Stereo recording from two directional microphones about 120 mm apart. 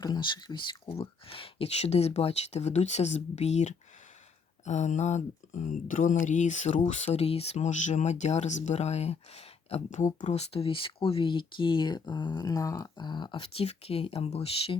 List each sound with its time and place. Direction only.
0.0 s speech: 35° left (ahead or behind); by 3.7 s 70° left (ahead or behind)
4.6 s speech: 85° left; by 14.8 s 55° left (ahead or behind)